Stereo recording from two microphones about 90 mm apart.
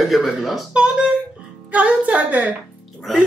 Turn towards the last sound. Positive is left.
turn(degrees=0)  # may be behind; listen again after turning